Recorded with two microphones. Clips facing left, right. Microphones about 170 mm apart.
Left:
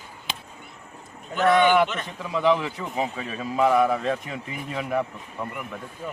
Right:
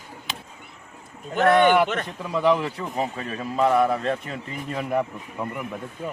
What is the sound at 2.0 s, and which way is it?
A man's voice, centre (ahead or behind).